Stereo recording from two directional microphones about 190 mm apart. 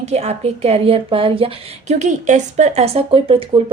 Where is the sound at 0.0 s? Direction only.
35° right (ahead or behind).